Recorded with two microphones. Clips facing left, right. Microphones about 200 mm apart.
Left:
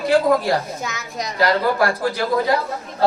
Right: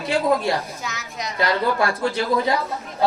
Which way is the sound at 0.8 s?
50° left (ahead or behind).